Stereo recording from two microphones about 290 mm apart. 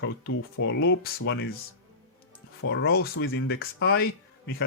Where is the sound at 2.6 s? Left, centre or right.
Left.